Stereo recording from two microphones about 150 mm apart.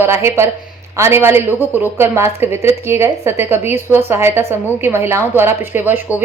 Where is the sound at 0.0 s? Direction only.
15° right (ahead or behind).